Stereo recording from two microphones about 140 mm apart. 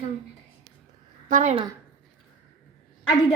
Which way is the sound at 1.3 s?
65° right (ahead or behind).